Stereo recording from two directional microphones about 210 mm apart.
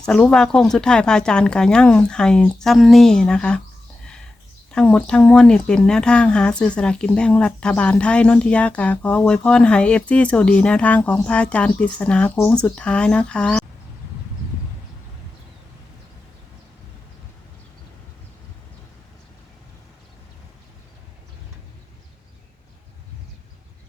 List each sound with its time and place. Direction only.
0.0 s speech: 5° left (ahead or behind)
4.7 s speech: 5° left (ahead or behind)